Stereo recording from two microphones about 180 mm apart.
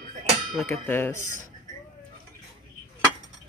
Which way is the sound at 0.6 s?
15° left (ahead or behind).